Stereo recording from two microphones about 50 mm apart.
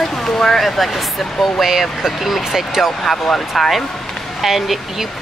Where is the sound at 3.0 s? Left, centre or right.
Centre.